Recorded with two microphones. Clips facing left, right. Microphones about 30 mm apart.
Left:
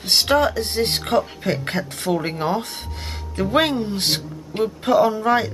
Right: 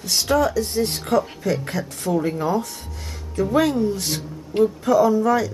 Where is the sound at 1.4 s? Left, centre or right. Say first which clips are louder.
Even; left.